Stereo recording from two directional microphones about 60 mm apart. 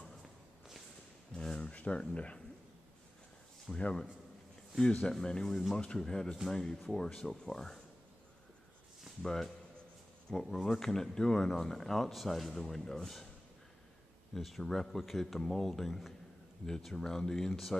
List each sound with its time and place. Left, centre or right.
1.3 s a sound: centre
3.7 s a man's voice: centre
5.1 s speech: centre
5.5 s speech: centre
5.8 s speech: centre
9.2 s speech: centre
14.3 s speech: centre